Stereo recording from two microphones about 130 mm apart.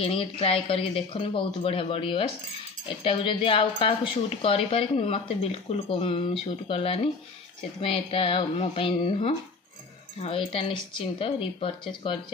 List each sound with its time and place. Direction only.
0.0 s a woman's voice: 45° left (ahead or behind)